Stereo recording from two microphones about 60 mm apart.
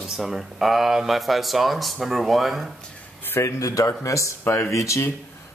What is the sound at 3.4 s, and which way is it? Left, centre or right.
Speech, left.